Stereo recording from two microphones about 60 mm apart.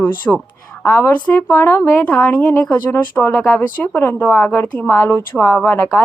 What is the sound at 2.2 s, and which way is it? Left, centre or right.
Speech, left.